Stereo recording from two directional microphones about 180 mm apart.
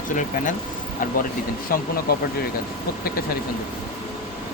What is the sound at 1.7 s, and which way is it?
Speech, 55° left (ahead or behind).